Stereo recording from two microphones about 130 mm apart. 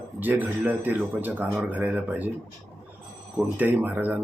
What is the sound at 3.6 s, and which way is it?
Speech, 15° right (ahead or behind).